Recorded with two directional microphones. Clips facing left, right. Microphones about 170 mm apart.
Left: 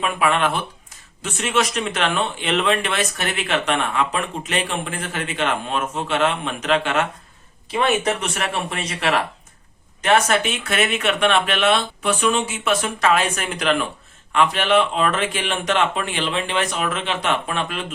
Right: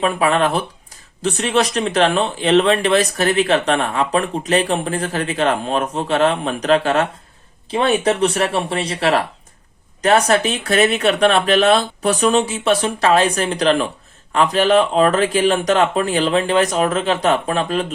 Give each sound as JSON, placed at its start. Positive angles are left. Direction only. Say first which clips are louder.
{"t": 0.0, "sound": "speech", "louder": "right 4 dB", "side_deg": -35}